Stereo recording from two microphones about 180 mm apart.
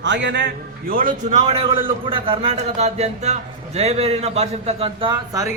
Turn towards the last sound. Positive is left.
turn(degrees=-20)  # may be behind; listen again after turning